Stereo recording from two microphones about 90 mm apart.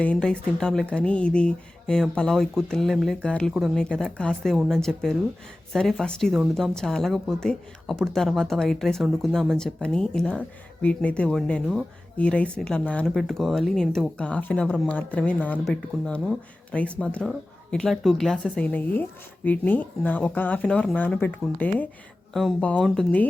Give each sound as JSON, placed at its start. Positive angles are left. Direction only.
{"t": 0.0, "sound": "speech", "side_deg": 10}
{"t": 13.1, "sound": "speech", "side_deg": 0}
{"t": 14.2, "sound": "speech", "side_deg": 15}
{"t": 18.6, "sound": "speech", "side_deg": 20}
{"t": 22.3, "sound": "speech", "side_deg": 0}